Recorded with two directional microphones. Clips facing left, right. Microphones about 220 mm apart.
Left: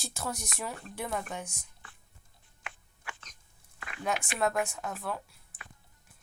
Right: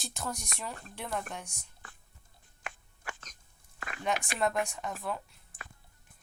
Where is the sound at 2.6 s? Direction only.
45° right (ahead or behind).